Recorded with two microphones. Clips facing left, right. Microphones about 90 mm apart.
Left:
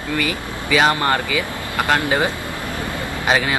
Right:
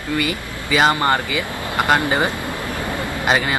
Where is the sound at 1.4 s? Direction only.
20° right (ahead or behind).